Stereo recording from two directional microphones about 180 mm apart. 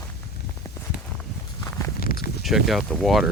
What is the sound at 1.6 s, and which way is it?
Walk, 15° left (ahead or behind).